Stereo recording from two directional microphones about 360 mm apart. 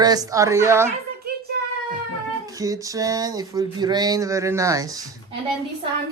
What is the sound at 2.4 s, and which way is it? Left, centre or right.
Speech, centre.